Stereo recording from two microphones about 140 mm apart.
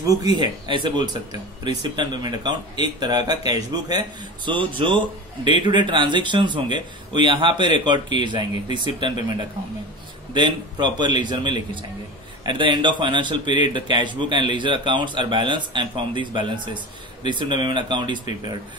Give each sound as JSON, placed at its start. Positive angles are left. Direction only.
{"t": 0.0, "sound": "a man's voice", "side_deg": -25}
{"t": 4.5, "sound": "a man's voice", "side_deg": -35}
{"t": 10.3, "sound": "a man's voice", "side_deg": -35}